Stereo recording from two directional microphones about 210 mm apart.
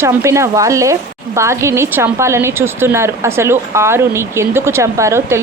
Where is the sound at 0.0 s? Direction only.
15° right (ahead or behind).